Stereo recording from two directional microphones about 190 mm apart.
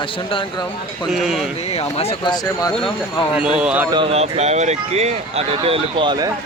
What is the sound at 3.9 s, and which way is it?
Speech, 30° right (ahead or behind).